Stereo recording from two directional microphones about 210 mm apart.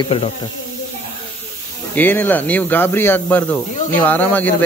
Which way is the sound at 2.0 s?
10° left (ahead or behind).